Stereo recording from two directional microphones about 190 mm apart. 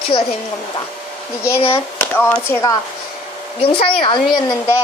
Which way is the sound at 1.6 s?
30° left (ahead or behind).